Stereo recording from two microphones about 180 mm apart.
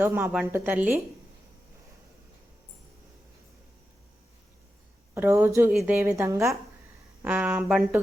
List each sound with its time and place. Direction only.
0.0 s a woman's voice: 10° right (ahead or behind)
5.1 s a woman's voice: 15° right (ahead or behind)